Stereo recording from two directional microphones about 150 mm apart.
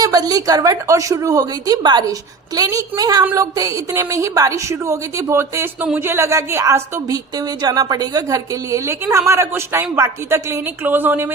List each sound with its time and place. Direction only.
0.0 s a woman's voice: 25° right (ahead or behind)